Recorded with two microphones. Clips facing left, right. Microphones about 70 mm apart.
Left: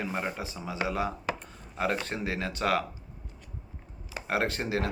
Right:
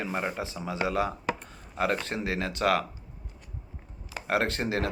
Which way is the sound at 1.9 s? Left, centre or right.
Centre.